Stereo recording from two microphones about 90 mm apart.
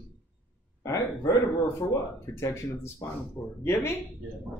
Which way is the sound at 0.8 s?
35° left (ahead or behind).